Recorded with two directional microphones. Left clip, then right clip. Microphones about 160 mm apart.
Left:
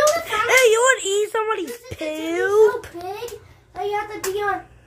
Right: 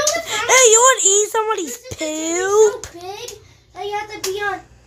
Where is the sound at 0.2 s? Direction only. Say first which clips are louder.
Right 2 dB; 25° right (ahead or behind).